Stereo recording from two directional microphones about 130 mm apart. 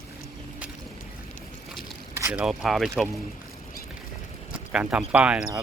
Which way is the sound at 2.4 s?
Centre (ahead or behind).